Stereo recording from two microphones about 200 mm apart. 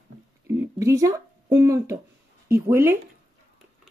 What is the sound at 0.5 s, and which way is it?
Speech, 15° right (ahead or behind).